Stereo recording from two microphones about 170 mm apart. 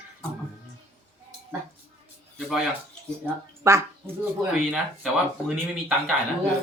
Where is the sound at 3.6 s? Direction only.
20° right (ahead or behind).